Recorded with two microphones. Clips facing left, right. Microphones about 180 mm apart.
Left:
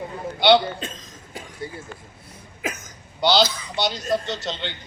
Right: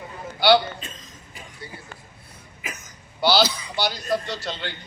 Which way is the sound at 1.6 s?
50° left (ahead or behind).